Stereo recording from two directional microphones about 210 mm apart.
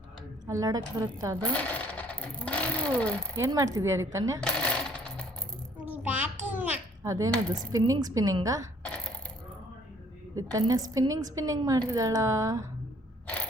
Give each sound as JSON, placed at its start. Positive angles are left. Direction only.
{"t": 0.4, "sound": "a woman's voice", "side_deg": -15}
{"t": 1.4, "sound": "speech", "side_deg": 5}
{"t": 3.3, "sound": "a woman's voice", "side_deg": -15}
{"t": 4.4, "sound": "coin", "side_deg": 5}
{"t": 5.8, "sound": "a sound", "side_deg": -5}
{"t": 7.5, "sound": "a woman's voice", "side_deg": -15}
{"t": 10.3, "sound": "a woman's voice", "side_deg": -15}